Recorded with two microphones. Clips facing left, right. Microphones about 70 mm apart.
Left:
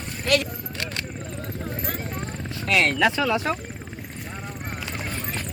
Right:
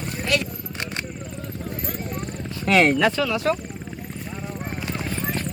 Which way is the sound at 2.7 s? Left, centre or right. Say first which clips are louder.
Right 5 dB; right.